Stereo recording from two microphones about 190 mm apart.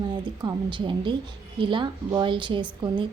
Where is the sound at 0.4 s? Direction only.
25° right (ahead or behind).